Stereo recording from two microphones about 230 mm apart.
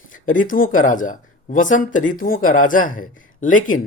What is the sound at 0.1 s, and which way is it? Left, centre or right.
Speech, left.